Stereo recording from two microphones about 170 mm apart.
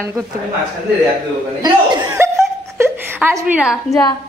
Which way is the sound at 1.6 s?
20° right (ahead or behind).